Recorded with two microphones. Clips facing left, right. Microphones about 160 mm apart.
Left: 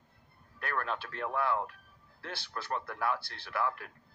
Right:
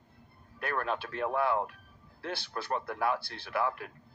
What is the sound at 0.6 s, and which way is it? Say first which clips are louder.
Speech: right 3 dB; 15° right (ahead or behind).